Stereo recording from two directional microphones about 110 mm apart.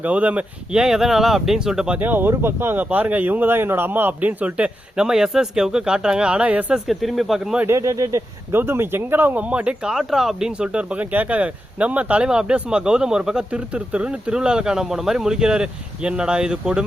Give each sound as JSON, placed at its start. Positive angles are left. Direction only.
{"t": 0.0, "sound": "speech", "side_deg": -15}
{"t": 2.0, "sound": "speech", "side_deg": -15}
{"t": 7.7, "sound": "speech", "side_deg": -30}